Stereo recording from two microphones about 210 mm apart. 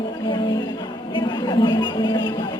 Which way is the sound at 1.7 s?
20° left (ahead or behind).